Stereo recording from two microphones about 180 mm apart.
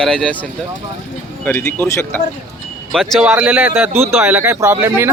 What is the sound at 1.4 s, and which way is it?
Speech, 10° left (ahead or behind).